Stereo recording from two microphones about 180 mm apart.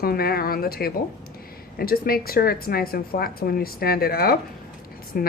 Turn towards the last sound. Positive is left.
turn(degrees=55)  # may be behind; listen again after turning